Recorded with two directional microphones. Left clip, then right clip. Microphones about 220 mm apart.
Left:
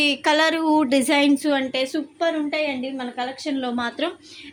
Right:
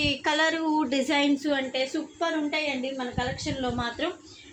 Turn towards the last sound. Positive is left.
turn(degrees=55)  # may be behind; listen again after turning